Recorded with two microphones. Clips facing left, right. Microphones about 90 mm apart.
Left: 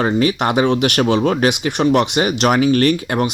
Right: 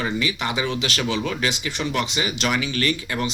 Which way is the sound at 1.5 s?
60° left (ahead or behind).